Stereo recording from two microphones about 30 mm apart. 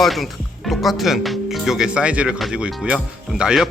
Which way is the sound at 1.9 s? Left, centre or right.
Right.